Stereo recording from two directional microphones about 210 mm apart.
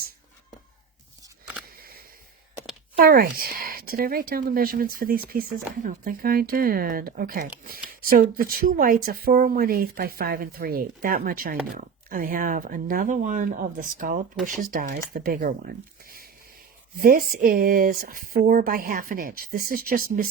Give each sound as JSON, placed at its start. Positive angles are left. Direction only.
{"t": 3.0, "sound": "speech", "side_deg": -45}